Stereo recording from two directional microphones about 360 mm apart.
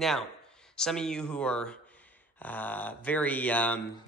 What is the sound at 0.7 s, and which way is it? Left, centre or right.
Speech, centre.